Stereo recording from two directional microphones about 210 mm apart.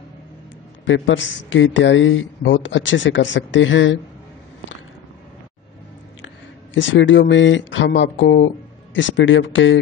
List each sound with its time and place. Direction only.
0.8 s speech: 65° left (ahead or behind)
6.7 s speech: 60° left (ahead or behind)